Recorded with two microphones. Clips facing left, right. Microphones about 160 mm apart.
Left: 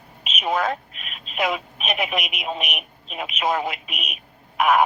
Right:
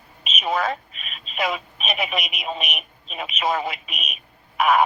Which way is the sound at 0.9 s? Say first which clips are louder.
Left 1 dB; 70° left (ahead or behind).